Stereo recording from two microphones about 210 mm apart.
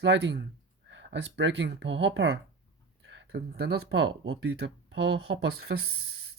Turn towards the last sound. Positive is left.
turn(degrees=-50)  # may be behind; listen again after turning